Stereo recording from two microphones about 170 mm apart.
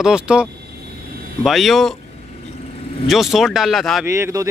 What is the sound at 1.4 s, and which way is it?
Speech, centre (ahead or behind).